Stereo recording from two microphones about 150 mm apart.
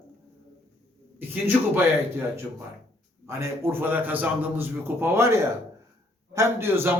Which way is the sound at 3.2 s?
15° right (ahead or behind).